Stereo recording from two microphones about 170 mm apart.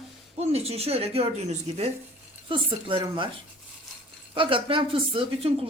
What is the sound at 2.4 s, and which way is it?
Speech, 30° right (ahead or behind).